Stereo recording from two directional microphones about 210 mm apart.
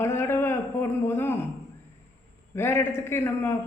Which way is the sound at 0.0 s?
10° left (ahead or behind).